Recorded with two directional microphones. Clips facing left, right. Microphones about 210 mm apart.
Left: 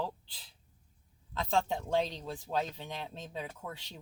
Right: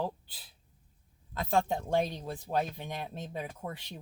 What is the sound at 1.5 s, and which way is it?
Speech, 10° right (ahead or behind).